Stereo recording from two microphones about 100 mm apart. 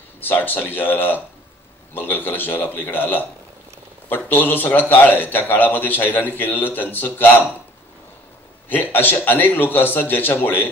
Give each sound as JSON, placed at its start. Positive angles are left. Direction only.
{"t": 0.2, "sound": "a man's voice", "side_deg": 20}
{"t": 8.6, "sound": "a man's voice", "side_deg": 20}